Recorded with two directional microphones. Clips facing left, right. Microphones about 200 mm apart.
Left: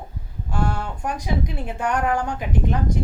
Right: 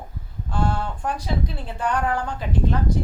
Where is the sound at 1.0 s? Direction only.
15° left (ahead or behind).